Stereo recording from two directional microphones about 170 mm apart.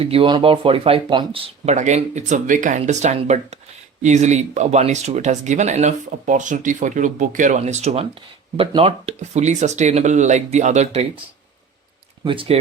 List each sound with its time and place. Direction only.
0.0 s speech: 35° right (ahead or behind)
1.6 s speech: 45° right (ahead or behind)
12.2 s speech: 30° right (ahead or behind)